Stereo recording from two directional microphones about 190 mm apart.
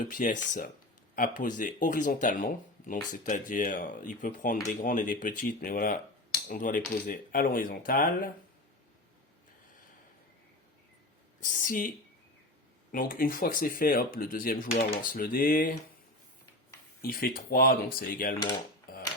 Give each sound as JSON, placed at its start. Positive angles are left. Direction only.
{"t": 0.1, "sound": "speech", "side_deg": 40}
{"t": 11.3, "sound": "speech", "side_deg": 45}
{"t": 12.9, "sound": "speech", "side_deg": 50}
{"t": 17.0, "sound": "speech", "side_deg": 50}